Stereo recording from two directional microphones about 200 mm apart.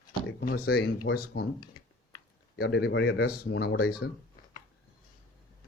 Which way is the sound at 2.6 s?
60° left (ahead or behind).